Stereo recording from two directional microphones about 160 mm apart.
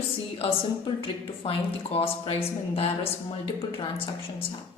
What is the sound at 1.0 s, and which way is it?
A woman's voice, 35° left (ahead or behind).